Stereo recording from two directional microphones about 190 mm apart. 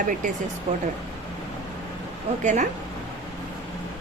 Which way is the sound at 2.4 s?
40° right (ahead or behind).